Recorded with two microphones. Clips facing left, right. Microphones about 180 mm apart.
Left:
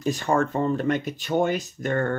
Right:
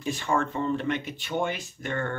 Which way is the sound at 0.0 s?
40° left (ahead or behind).